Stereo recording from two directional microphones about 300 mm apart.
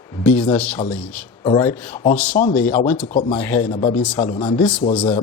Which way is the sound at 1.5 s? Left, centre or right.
Centre.